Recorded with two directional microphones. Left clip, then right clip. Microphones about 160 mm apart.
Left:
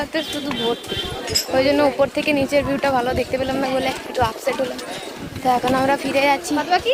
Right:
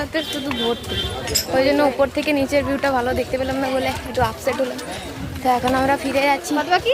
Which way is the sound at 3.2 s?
30° left (ahead or behind).